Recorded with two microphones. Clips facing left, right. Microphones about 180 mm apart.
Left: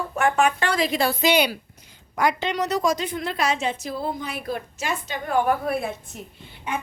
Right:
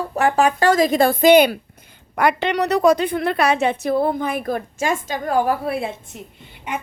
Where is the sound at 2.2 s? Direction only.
60° right (ahead or behind).